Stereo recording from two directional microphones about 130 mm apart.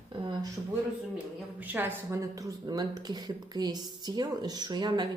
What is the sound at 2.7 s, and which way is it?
Speech, 30° right (ahead or behind).